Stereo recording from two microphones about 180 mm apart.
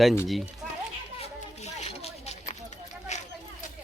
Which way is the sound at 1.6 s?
35° left (ahead or behind).